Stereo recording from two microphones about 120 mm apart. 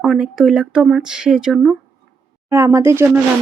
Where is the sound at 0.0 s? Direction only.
Centre (ahead or behind).